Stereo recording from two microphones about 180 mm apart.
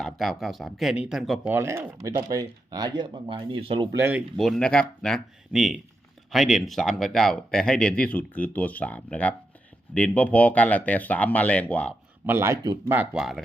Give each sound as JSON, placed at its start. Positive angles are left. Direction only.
{"t": 0.0, "sound": "speech", "side_deg": 0}
{"t": 1.5, "sound": "speech", "side_deg": -15}
{"t": 4.4, "sound": "speech", "side_deg": 0}
{"t": 12.2, "sound": "speech", "side_deg": -15}